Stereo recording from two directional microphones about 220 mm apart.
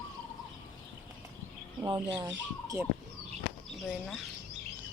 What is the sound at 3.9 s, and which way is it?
Speech, centre (ahead or behind).